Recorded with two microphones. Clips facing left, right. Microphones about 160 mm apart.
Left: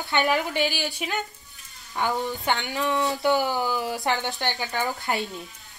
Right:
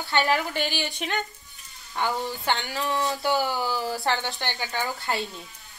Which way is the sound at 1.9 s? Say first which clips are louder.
Left 1 dB; 20° left (ahead or behind).